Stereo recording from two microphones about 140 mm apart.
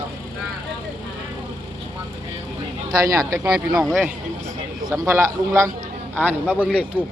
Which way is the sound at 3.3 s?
25° right (ahead or behind).